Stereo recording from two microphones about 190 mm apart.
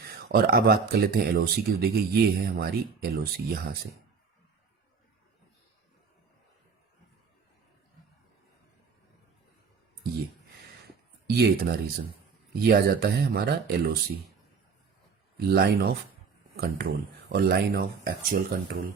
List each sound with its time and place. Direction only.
0.0 s speech: 55° right (ahead or behind)
11.3 s speech: 55° right (ahead or behind)
15.4 s speech: 55° right (ahead or behind)